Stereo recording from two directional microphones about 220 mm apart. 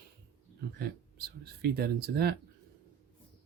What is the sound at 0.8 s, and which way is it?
Speech, 45° right (ahead or behind).